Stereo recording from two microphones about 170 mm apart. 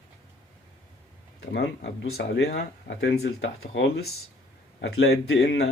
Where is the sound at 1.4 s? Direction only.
80° left.